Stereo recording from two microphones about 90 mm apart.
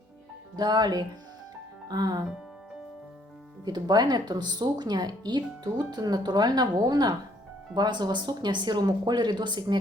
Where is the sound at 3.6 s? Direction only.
50° right (ahead or behind).